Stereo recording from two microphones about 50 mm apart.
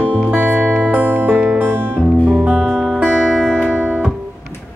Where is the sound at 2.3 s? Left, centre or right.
Right.